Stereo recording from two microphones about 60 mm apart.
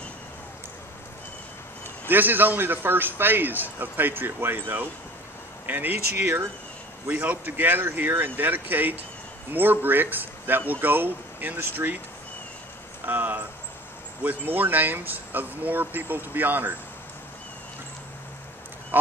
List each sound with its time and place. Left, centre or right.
2.0 s a man's voice: right
13.0 s a sound: right
14.2 s a man's voice: right